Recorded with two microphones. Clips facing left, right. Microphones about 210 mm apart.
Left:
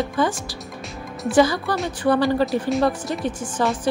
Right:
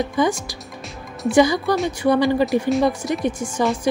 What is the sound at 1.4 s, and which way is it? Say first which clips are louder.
A woman's voice: right 2 dB; 15° right (ahead or behind).